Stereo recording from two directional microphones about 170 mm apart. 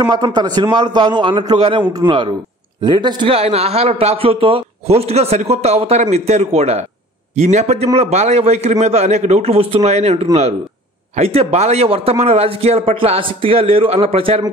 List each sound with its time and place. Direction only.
0.0 s a man's voice: 25° right (ahead or behind)